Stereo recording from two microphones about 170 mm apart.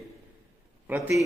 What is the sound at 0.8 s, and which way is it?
Speech, 10° right (ahead or behind).